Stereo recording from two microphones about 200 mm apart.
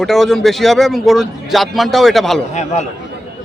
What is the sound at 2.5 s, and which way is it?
Speech, 35° left (ahead or behind).